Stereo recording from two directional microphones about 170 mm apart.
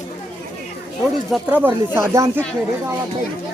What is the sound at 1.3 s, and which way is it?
Speech, 10° right (ahead or behind).